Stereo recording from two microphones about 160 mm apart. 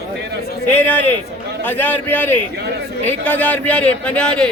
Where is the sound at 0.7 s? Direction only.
10° left (ahead or behind).